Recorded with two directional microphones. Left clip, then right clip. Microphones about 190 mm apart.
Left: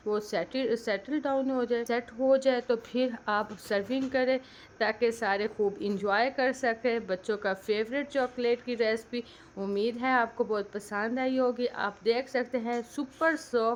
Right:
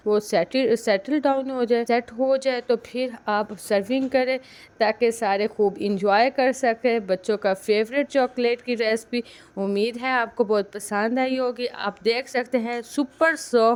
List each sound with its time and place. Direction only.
0.1 s a woman's voice: 35° right (ahead or behind)